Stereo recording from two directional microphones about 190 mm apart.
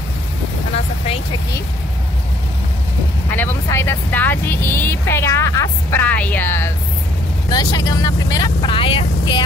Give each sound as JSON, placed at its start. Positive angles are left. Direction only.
{"t": 3.3, "sound": "speech", "side_deg": 10}